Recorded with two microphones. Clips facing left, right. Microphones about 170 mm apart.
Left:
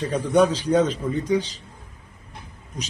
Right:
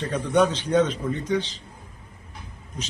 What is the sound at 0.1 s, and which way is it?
A man's voice, 10° left (ahead or behind).